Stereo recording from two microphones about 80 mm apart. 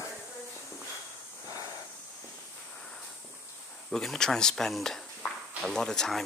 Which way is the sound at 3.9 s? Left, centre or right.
Centre.